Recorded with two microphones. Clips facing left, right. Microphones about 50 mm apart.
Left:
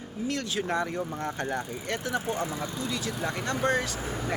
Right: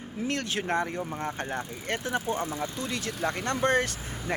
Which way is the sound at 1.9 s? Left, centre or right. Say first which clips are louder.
Right 1 dB; right.